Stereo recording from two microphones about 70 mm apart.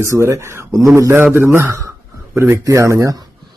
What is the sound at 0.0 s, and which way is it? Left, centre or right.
A man's voice, right.